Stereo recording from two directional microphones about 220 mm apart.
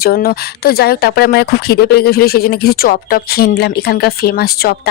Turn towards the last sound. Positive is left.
turn(degrees=45)  # may be behind; listen again after turning